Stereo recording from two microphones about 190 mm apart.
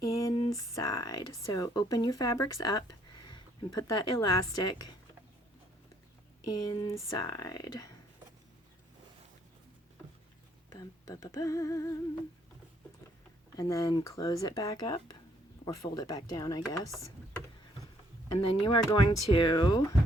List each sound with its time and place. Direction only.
0.0 s speech: 15° left (ahead or behind)
6.5 s speech: 20° left (ahead or behind)
10.7 s a sound: 20° left (ahead or behind)
13.6 s speech: 15° left (ahead or behind)
18.3 s speech: 25° left (ahead or behind)